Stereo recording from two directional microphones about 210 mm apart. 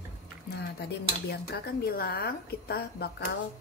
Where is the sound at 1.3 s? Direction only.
45° left (ahead or behind).